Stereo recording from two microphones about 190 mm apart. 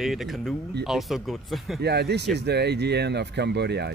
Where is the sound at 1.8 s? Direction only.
60° right (ahead or behind).